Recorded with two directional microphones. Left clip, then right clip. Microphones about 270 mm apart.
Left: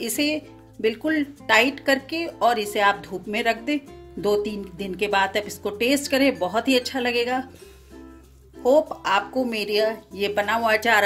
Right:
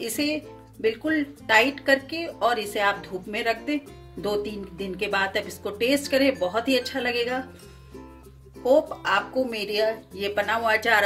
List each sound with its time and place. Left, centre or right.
0.0 s speech: left
8.6 s speech: left